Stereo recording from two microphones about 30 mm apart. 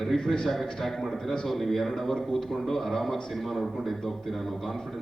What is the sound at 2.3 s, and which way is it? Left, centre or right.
A man's voice, centre.